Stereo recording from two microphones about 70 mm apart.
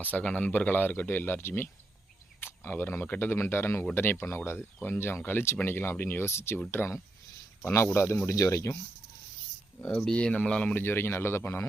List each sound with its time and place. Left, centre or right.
0.0 s speech: left
9.9 s speech: centre
10.8 s speech: left